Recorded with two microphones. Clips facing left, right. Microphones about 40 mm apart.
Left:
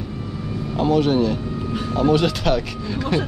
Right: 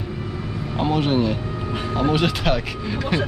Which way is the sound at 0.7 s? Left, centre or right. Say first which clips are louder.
Left 3 dB; centre.